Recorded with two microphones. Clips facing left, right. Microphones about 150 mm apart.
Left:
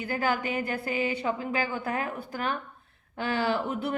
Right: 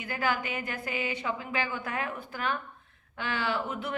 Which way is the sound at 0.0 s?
35° left (ahead or behind).